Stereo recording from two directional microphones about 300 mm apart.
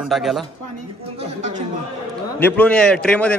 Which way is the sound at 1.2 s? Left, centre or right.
Right.